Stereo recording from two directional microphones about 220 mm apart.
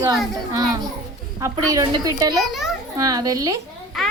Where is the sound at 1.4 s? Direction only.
15° right (ahead or behind).